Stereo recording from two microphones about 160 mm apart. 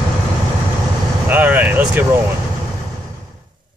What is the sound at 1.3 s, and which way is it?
Speech, 10° right (ahead or behind).